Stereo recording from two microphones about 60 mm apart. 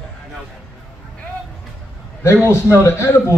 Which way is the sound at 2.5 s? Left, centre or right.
Left.